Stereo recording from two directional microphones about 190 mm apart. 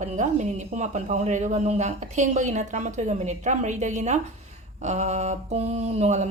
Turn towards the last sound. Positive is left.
turn(degrees=-35)  # may be behind; listen again after turning